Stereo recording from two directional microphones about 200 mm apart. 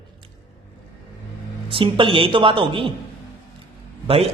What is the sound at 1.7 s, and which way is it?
A man's voice, 25° right (ahead or behind).